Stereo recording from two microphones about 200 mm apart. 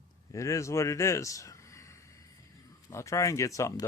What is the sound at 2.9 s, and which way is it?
Speech, 15° left (ahead or behind).